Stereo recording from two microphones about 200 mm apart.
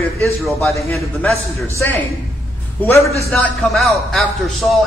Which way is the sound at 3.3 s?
Centre (ahead or behind).